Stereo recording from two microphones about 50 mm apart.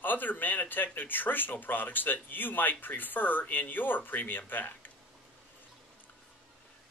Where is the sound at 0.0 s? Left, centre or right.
Left.